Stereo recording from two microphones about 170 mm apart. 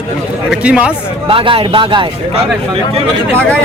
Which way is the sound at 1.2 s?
30° right (ahead or behind).